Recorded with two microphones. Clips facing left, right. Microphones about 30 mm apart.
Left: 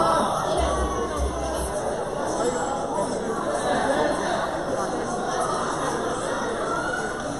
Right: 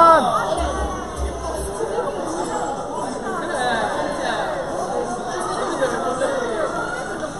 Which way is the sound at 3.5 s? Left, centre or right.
Right.